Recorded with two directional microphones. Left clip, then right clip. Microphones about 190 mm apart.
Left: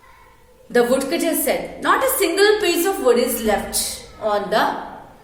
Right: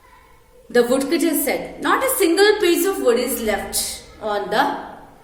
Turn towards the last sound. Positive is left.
turn(degrees=-15)  # may be behind; listen again after turning